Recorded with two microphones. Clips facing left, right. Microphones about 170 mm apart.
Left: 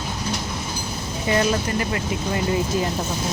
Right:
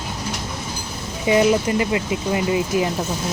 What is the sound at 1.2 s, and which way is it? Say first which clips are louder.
Speech: right 5 dB; 15° right (ahead or behind).